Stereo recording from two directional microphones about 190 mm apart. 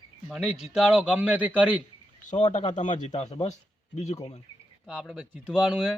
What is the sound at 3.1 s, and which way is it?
Speech, 35° left (ahead or behind).